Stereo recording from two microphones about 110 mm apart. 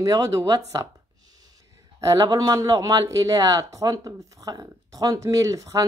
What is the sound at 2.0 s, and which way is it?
Speech, 35° right (ahead or behind).